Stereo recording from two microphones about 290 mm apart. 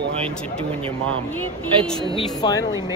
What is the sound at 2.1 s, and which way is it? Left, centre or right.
Speech, centre.